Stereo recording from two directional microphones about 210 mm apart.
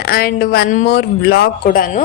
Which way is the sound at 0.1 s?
45° left (ahead or behind).